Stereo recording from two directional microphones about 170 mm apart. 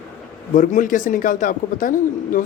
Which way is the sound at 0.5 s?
50° left (ahead or behind).